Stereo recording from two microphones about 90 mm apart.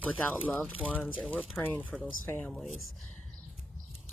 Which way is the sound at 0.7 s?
15° left (ahead or behind).